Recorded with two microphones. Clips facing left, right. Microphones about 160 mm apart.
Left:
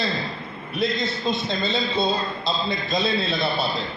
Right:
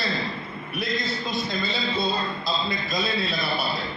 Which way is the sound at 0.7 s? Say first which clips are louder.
Left 4 dB; 25° left (ahead or behind).